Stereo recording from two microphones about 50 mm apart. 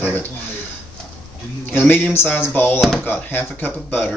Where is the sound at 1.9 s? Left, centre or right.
Left.